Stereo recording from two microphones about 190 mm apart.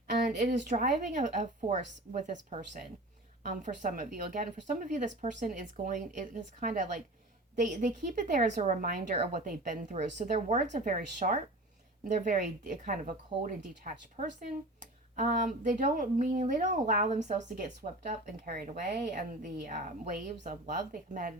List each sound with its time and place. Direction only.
0.1 s speech: 45° right (ahead or behind)